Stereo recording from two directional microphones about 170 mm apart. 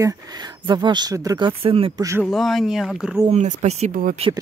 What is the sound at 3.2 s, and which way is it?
Speech, 40° right (ahead or behind).